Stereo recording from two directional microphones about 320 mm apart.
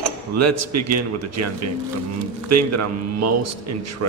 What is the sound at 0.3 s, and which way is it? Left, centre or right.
A man's voice, right.